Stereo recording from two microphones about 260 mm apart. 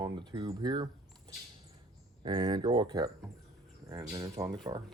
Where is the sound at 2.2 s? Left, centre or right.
Centre.